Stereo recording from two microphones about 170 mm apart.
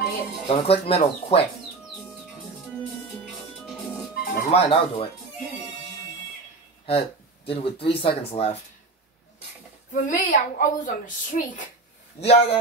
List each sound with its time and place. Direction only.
0.5 s speech: 35° left (ahead or behind)
3.3 s music: centre (ahead or behind)
4.2 s music: 60° left (ahead or behind)
4.5 s speech: 35° left (ahead or behind)
6.9 s speech: 35° left (ahead or behind)
9.9 s a woman's voice: 50° left (ahead or behind)
12.2 s speech: 35° left (ahead or behind)